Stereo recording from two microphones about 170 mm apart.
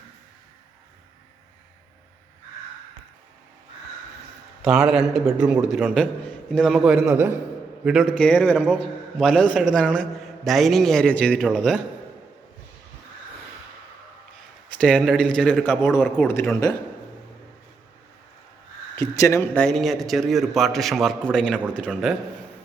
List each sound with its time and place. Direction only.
4.6 s a man's voice: 5° right (ahead or behind)
14.8 s a man's voice: centre (ahead or behind)
18.9 s a man's voice: 20° left (ahead or behind)
19.5 s a man's voice: 5° left (ahead or behind)